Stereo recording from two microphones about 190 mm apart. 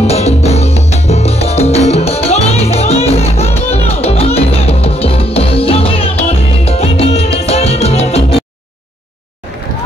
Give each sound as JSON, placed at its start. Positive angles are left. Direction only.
{"t": 0.0, "sound": "salsa music", "side_deg": 35}